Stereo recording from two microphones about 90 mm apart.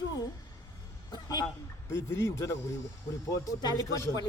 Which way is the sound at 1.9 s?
25° left (ahead or behind).